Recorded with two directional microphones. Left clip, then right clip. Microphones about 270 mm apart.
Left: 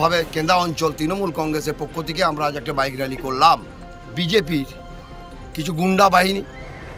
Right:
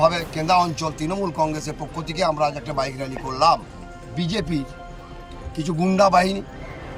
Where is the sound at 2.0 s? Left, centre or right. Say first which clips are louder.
Even; centre.